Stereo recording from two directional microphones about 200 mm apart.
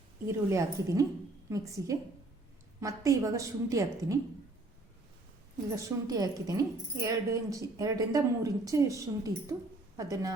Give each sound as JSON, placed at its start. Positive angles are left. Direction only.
{"t": 0.3, "sound": "speech", "side_deg": -15}
{"t": 5.7, "sound": "speech", "side_deg": -15}